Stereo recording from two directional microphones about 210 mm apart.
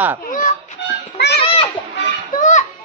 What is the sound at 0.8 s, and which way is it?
Music, 55° left (ahead or behind).